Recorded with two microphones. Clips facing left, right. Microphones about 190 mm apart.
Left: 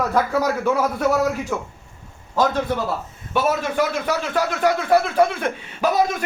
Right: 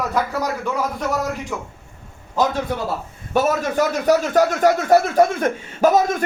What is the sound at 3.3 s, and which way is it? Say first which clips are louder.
A man's voice: right 2 dB; 45° right (ahead or behind).